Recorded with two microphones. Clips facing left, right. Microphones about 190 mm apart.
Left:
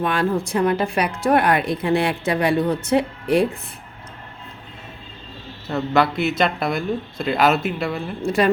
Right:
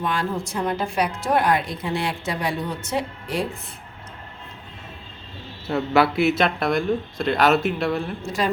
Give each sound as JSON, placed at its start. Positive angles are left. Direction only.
{"t": 0.0, "sound": "speech", "side_deg": 60}
{"t": 5.6, "sound": "speech", "side_deg": -10}